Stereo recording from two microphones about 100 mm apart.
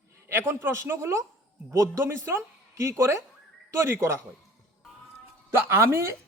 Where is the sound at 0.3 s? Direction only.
25° right (ahead or behind).